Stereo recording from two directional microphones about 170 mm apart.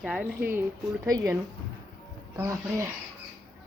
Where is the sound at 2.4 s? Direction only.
15° right (ahead or behind).